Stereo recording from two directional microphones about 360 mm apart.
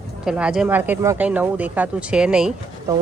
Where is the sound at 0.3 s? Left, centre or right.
Centre.